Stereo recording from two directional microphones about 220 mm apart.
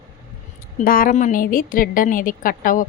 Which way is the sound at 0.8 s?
40° left (ahead or behind).